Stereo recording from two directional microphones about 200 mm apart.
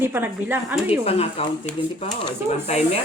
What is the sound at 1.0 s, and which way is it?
Speech, 30° left (ahead or behind).